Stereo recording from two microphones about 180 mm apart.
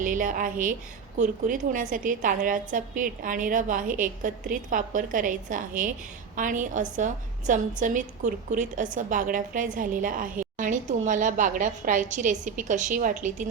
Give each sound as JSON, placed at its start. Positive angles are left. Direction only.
{"t": 0.0, "sound": "a woman's voice", "side_deg": -45}